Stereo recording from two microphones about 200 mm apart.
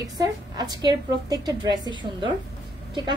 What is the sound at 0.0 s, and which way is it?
A woman's voice, 20° right (ahead or behind).